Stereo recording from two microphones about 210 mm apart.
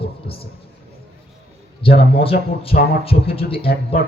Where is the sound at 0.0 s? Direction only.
25° left (ahead or behind).